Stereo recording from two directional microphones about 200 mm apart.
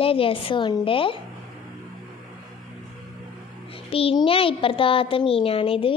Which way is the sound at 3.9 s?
30° left (ahead or behind).